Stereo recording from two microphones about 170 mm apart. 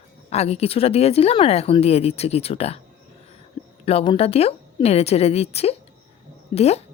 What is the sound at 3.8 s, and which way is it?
Speech, 35° left (ahead or behind).